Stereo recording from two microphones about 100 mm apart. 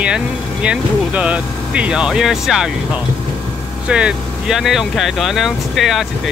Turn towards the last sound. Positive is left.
turn(degrees=0)  # may be behind; listen again after turning